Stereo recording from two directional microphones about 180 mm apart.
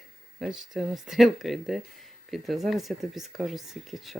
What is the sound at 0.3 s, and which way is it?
Speech, centre (ahead or behind).